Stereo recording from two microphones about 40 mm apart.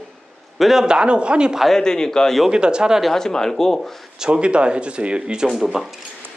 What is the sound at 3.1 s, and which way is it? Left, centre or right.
Speech, centre.